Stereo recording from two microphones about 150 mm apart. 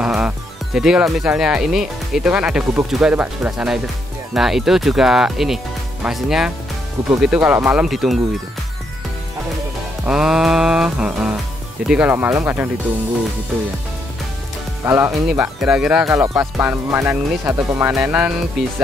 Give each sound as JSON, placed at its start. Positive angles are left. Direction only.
{"t": 0.0, "sound": "music", "side_deg": -5}
{"t": 0.7, "sound": "speech", "side_deg": -5}
{"t": 7.8, "sound": "speech", "side_deg": 0}
{"t": 10.0, "sound": "speech", "side_deg": -5}
{"t": 14.9, "sound": "speech", "side_deg": -20}
{"t": 15.2, "sound": "speech", "side_deg": -10}